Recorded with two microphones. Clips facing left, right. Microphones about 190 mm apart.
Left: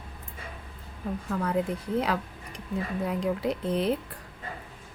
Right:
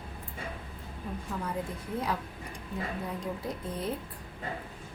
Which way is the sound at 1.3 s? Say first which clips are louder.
Left 8 dB; 65° left (ahead or behind).